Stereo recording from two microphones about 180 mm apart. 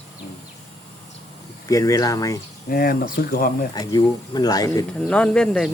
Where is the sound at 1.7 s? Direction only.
20° left (ahead or behind).